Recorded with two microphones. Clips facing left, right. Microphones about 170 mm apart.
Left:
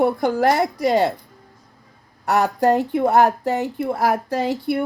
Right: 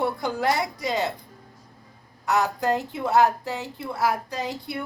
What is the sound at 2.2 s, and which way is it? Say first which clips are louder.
A woman's voice: left 6 dB; 50° left (ahead or behind).